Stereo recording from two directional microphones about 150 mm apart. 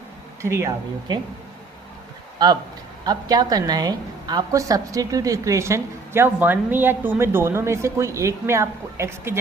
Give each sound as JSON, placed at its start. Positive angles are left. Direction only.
{"t": 0.4, "sound": "speech", "side_deg": -15}
{"t": 3.0, "sound": "a woman's voice", "side_deg": -25}